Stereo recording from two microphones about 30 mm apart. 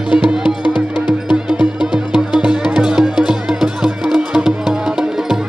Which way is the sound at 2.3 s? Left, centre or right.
Right.